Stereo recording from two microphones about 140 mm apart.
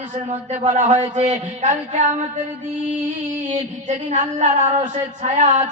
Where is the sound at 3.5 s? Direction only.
55° right (ahead or behind).